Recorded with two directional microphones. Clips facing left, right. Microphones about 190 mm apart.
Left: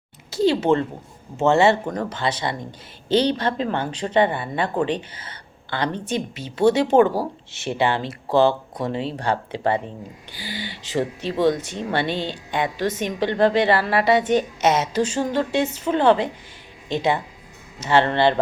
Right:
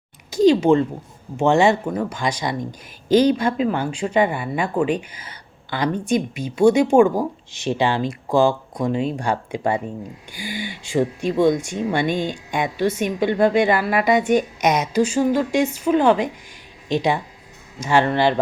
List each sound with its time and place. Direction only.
0.3 s speech: 15° right (ahead or behind)